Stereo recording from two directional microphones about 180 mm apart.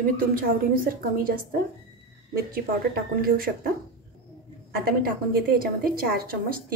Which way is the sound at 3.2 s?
55° right (ahead or behind).